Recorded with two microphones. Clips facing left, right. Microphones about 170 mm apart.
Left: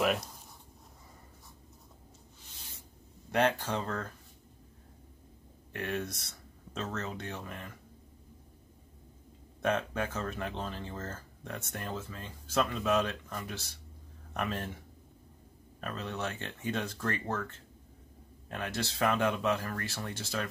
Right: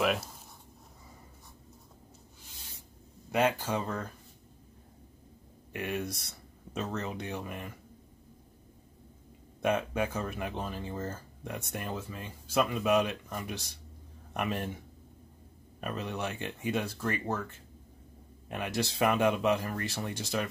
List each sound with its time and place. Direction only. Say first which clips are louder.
0.0 s speech: even; centre (ahead or behind)
3.3 s speech: right 1 dB; 5° right (ahead or behind)
5.7 s speech: right 1 dB; 10° right (ahead or behind)
9.6 s a man's voice: right 2 dB; 10° right (ahead or behind)
15.8 s speech: right 2 dB; 15° right (ahead or behind)